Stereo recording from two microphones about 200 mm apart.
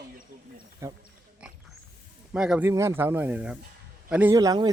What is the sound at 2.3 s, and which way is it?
A man's voice, 5° right (ahead or behind).